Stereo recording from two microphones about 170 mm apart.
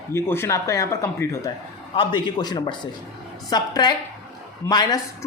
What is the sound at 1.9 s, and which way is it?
Speech, 30° left (ahead or behind).